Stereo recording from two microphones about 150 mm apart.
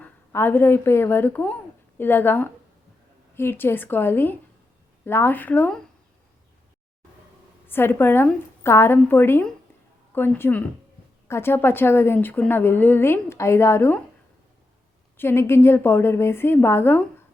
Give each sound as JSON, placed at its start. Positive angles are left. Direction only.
{"t": 0.0, "sound": "a woman's voice", "side_deg": 15}
{"t": 7.7, "sound": "a woman's voice", "side_deg": 15}
{"t": 15.2, "sound": "a woman's voice", "side_deg": 15}